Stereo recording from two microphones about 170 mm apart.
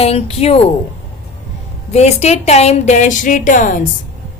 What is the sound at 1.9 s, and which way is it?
A woman's voice, 40° left (ahead or behind).